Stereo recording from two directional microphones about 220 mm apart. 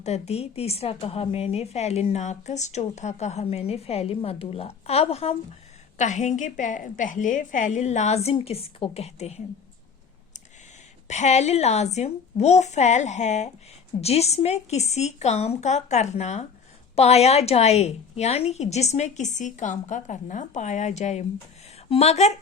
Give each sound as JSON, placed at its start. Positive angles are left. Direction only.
{"t": 0.0, "sound": "a woman's voice", "side_deg": 30}
{"t": 11.1, "sound": "a woman's voice", "side_deg": 30}